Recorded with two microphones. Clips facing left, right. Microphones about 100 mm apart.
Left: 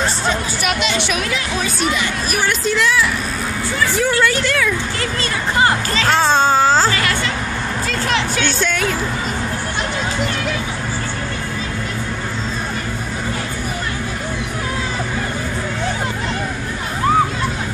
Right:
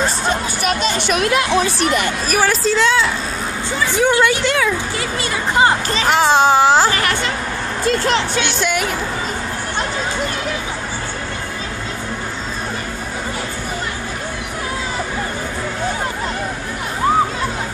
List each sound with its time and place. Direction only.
0.3 s speech: 40° right (ahead or behind); by 7.2 s 15° right (ahead or behind)